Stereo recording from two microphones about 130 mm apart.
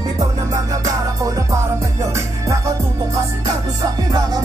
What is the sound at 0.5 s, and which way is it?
Music, 25° right (ahead or behind).